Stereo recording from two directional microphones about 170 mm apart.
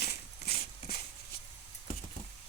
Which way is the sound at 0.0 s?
65° left (ahead or behind).